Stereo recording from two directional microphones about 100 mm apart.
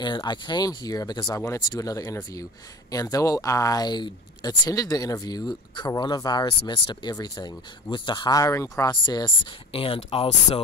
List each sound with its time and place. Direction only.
0.0 s speech: 50° left (ahead or behind)
7.2 s speech: 40° left (ahead or behind)
7.9 s speech: 50° left (ahead or behind)
8.4 s speech: 30° left (ahead or behind)
9.0 s speech: 50° left (ahead or behind); by 10.6 s 80° left